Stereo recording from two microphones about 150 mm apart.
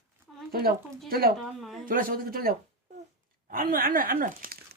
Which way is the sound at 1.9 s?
70° right (ahead or behind).